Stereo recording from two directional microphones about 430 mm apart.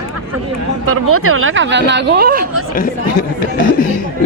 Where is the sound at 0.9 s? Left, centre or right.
Right.